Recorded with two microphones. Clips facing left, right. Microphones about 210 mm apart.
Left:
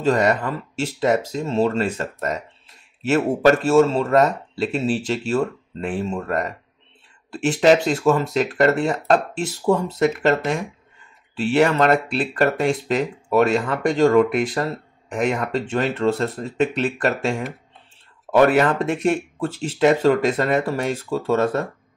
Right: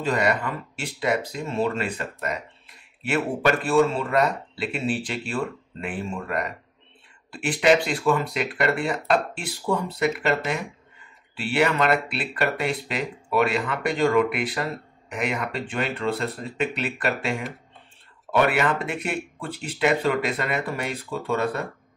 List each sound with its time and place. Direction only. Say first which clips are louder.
0.0 s speech: left 5 dB; 45° left (ahead or behind)
7.6 s speech: left 4 dB; 45° left (ahead or behind)